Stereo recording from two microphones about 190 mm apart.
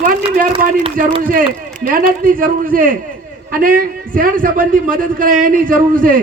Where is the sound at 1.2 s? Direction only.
50° right (ahead or behind).